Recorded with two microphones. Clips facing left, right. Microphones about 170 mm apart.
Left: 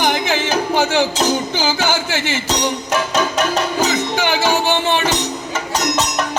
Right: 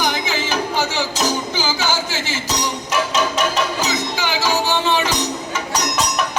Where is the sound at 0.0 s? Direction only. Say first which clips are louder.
Left 4 dB; 60° left (ahead or behind).